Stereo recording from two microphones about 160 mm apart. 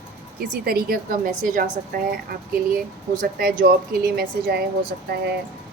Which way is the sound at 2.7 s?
60° right (ahead or behind).